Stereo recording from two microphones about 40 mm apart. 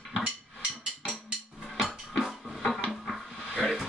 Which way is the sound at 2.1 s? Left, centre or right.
Centre.